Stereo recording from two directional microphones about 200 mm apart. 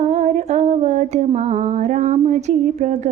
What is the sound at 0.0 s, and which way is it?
Female singing, 35° right (ahead or behind).